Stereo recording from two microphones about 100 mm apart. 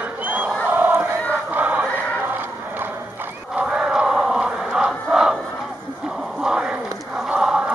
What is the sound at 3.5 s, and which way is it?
Crowd, 10° right (ahead or behind).